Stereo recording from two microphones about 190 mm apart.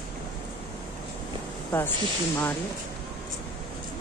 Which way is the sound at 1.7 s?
5° left (ahead or behind).